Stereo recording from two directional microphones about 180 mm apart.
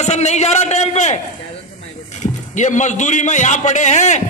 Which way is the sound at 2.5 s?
40° left (ahead or behind).